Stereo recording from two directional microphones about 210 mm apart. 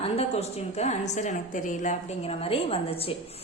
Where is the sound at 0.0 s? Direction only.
30° left (ahead or behind).